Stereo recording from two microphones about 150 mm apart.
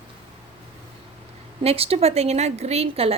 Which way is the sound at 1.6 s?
40° right (ahead or behind).